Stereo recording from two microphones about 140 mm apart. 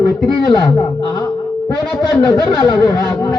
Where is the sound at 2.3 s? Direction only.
25° left (ahead or behind).